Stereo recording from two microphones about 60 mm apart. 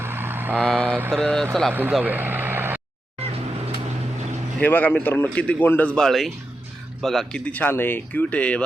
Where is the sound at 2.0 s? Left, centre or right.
Right.